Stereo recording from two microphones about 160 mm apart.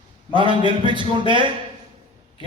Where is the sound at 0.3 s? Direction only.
30° right (ahead or behind).